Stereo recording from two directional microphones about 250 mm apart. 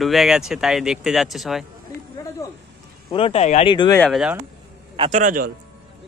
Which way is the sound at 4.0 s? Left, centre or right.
Centre.